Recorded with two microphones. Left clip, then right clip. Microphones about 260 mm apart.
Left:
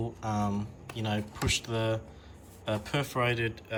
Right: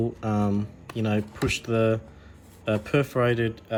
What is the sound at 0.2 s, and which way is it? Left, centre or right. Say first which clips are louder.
Speech: right 5 dB; centre.